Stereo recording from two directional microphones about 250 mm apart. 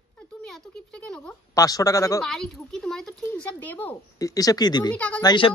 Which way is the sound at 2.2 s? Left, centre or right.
Centre.